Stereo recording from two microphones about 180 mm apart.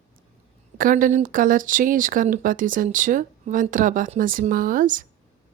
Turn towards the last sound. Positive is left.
turn(degrees=-45)  # may be behind; listen again after turning